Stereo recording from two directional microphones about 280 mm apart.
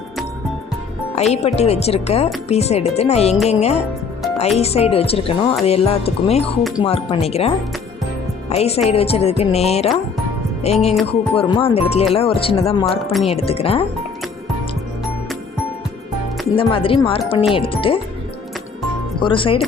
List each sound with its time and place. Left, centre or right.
1.1 s speech: left
16.6 s speech: centre
19.2 s speech: centre